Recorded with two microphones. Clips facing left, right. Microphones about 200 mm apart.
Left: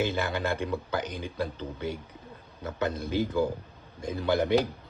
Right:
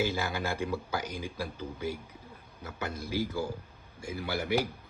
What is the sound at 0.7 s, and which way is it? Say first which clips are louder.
Speech: left 3 dB; 60° left (ahead or behind).